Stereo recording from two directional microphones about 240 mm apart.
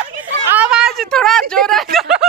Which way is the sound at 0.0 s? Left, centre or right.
Centre.